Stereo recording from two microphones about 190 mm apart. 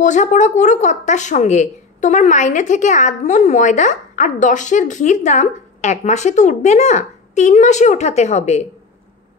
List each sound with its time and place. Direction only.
0.0 s a woman's voice: 40° left (ahead or behind)